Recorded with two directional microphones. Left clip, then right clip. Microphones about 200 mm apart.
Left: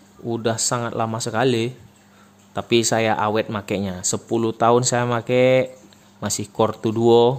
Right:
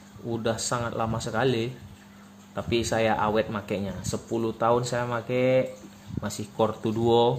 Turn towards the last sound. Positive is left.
turn(degrees=40)  # may be behind; listen again after turning